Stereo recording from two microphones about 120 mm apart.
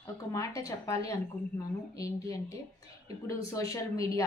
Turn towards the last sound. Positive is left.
turn(degrees=30)  # may be behind; listen again after turning